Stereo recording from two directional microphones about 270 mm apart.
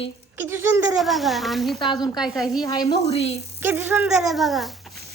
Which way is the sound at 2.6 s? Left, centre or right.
Centre.